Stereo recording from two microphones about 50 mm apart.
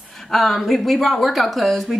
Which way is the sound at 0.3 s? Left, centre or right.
Centre.